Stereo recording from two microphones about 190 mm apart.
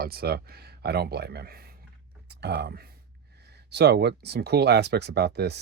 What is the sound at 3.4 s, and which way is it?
Speech, 60° right (ahead or behind).